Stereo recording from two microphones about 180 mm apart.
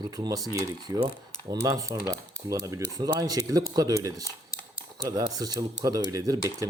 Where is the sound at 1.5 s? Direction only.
20° right (ahead or behind).